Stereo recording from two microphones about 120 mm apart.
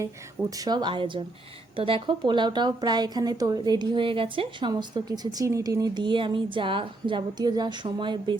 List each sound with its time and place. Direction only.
0.5 s speech: 30° right (ahead or behind)
4.7 s speech: 35° right (ahead or behind)